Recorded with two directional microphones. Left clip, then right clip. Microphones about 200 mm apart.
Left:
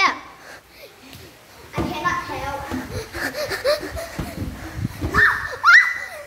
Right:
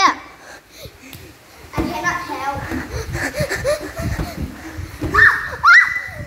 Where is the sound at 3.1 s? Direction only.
10° right (ahead or behind).